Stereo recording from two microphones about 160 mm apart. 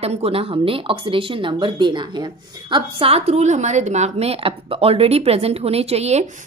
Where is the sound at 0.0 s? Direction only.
40° right (ahead or behind).